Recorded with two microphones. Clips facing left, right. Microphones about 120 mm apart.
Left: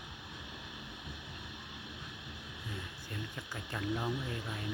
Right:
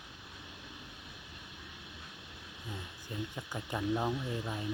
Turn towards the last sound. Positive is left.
turn(degrees=-20)  # may be behind; listen again after turning